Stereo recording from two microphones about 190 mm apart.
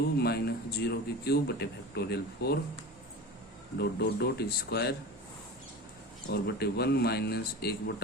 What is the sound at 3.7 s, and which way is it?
A man's voice, 60° left (ahead or behind).